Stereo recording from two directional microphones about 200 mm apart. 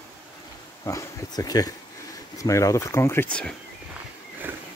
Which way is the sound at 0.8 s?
15° left (ahead or behind).